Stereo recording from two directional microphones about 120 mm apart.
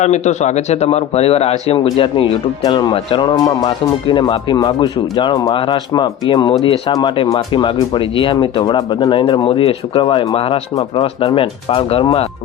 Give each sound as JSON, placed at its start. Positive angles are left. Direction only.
{"t": 0.0, "sound": "speech", "side_deg": 70}
{"t": 3.3, "sound": "speech", "side_deg": 35}
{"t": 3.7, "sound": "speech", "side_deg": 45}
{"t": 9.4, "sound": "speech", "side_deg": 50}